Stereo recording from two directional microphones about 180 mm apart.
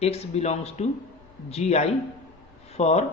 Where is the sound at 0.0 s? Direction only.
35° left (ahead or behind).